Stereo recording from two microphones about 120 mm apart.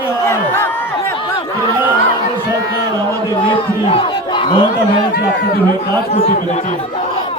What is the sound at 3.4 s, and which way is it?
Crowd, 50° left (ahead or behind).